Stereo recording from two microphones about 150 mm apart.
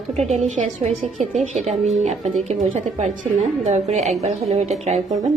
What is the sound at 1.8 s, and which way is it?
Speech, 50° right (ahead or behind).